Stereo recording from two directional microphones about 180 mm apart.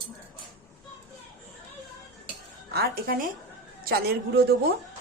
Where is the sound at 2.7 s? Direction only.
60° right (ahead or behind).